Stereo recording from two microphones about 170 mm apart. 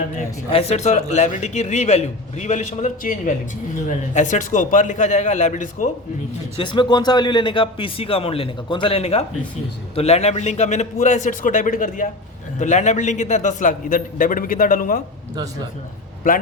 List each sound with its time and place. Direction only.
0.5 s a man's voice: 40° left (ahead or behind)
6.6 s a man's voice: 25° left (ahead or behind); by 15.0 s 55° left (ahead or behind)